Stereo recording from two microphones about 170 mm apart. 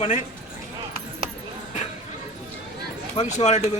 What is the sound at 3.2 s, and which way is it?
Speech, 40° left (ahead or behind).